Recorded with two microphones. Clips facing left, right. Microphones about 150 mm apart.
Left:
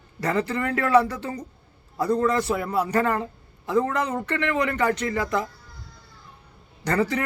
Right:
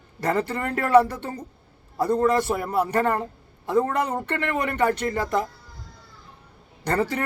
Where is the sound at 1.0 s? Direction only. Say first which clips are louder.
Right 1 dB; 30° right (ahead or behind).